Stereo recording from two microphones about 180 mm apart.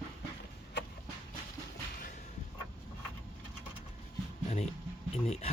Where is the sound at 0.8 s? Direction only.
70° left (ahead or behind).